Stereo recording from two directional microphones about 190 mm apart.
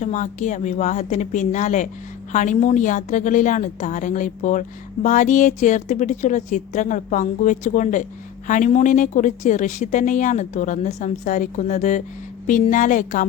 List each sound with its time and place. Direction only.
0.0 s a woman's voice: 40° left (ahead or behind)